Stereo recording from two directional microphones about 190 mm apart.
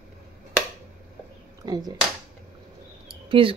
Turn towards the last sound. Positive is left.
turn(degrees=-30)  # may be behind; listen again after turning